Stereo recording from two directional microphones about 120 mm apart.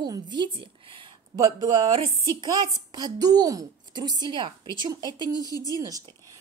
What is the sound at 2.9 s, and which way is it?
A woman's voice, 35° right (ahead or behind).